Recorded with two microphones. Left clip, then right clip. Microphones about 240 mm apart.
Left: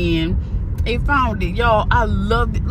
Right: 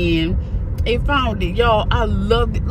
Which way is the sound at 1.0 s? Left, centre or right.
Centre.